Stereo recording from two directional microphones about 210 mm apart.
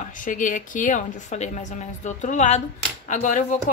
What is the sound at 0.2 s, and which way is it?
Speech, 40° left (ahead or behind).